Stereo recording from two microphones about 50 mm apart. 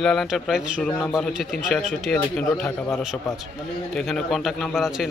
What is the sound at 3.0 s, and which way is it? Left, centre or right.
Speech, centre.